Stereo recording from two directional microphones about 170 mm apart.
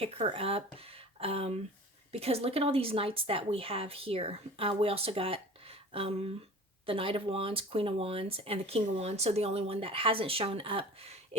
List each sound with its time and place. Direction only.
0.0 s speech: 35° right (ahead or behind)